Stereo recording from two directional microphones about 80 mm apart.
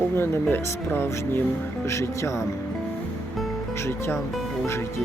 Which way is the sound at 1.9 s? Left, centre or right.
Left.